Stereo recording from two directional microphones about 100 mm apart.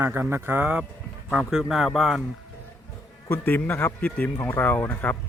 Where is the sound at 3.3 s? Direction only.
20° left (ahead or behind).